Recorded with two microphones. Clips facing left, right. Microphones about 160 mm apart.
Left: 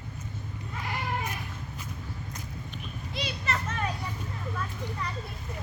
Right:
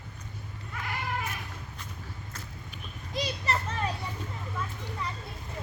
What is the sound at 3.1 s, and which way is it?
Children playing, 40° right (ahead or behind).